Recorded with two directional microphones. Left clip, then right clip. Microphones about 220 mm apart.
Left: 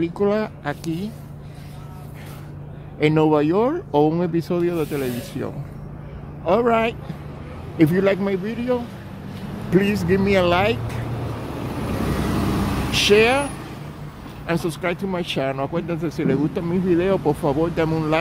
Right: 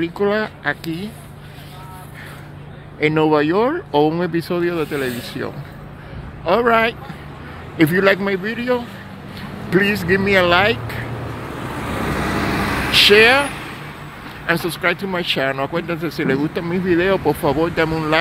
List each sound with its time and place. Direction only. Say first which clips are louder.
0.0 s speech: right 2 dB; 5° left (ahead or behind)
3.0 s speech: right 2 dB; 5° left (ahead or behind)
12.0 s vehicle: right 4 dB; 45° left (ahead or behind)
12.9 s speech: right 5 dB; centre (ahead or behind)